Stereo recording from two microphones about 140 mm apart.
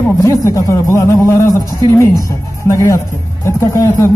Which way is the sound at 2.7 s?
20° left (ahead or behind).